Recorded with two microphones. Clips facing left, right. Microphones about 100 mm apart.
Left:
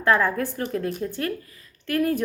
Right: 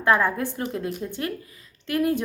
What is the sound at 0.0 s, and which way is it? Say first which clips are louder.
Speech: even; 20° right (ahead or behind).